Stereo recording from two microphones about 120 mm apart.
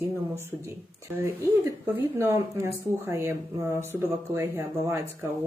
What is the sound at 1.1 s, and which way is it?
Speech, 20° right (ahead or behind).